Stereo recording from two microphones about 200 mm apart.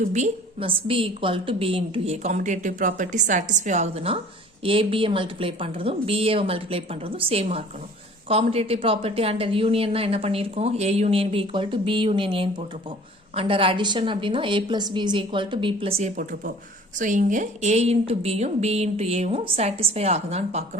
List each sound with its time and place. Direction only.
0.0 s a woman's voice: 35° right (ahead or behind)